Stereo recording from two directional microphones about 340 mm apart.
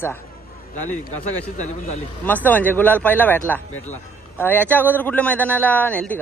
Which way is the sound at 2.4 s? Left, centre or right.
Centre.